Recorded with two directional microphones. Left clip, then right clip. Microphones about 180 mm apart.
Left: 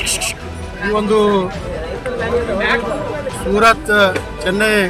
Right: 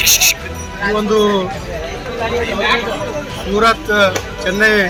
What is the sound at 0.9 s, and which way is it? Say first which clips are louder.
Speech: even; 30° left (ahead or behind).